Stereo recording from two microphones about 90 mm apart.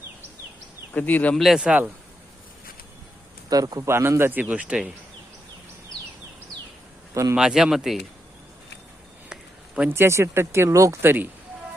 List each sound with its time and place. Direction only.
0.9 s speech: 20° left (ahead or behind)
1.4 s speech: 5° right (ahead or behind)
3.5 s speech: 45° right (ahead or behind)
3.8 s speech: 30° right (ahead or behind); by 4.9 s 15° right (ahead or behind)
7.1 s speech: 40° right (ahead or behind)
7.3 s speech: 5° right (ahead or behind)
9.3 s a sound: 10° right (ahead or behind)
9.9 s speech: 30° right (ahead or behind)
11.0 s speech: 25° right (ahead or behind)